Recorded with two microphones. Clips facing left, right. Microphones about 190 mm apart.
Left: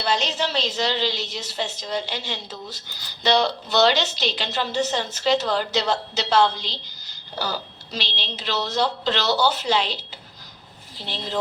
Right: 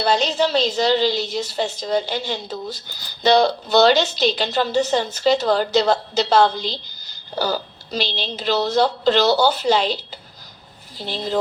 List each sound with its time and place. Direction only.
0.0 s a woman's voice: 40° right (ahead or behind)